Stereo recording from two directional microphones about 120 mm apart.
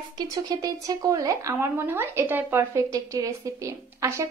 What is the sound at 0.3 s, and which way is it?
A woman's voice, 30° right (ahead or behind).